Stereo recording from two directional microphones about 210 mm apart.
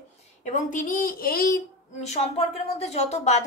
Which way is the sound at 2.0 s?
30° left (ahead or behind).